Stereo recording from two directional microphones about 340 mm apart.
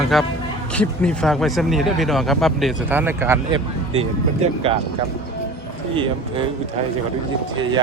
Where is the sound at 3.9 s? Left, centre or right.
Centre.